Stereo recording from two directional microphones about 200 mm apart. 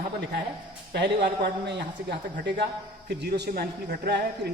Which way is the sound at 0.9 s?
55° right (ahead or behind).